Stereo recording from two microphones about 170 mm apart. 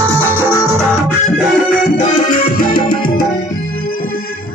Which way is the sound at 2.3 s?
55° left (ahead or behind).